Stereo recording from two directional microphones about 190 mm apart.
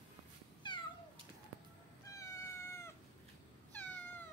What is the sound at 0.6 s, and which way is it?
Cat, 25° left (ahead or behind).